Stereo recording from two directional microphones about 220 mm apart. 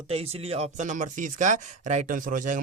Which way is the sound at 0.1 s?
30° right (ahead or behind).